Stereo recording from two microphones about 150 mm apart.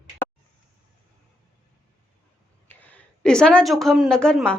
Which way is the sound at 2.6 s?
10° left (ahead or behind).